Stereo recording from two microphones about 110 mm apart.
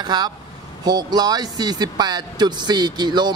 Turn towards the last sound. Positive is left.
turn(degrees=-40)  # may be behind; listen again after turning